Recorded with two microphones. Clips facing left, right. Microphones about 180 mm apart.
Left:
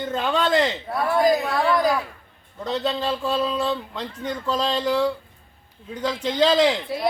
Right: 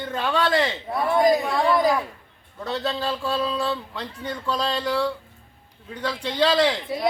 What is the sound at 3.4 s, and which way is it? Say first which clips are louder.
Speech: left 2 dB; 5° left (ahead or behind).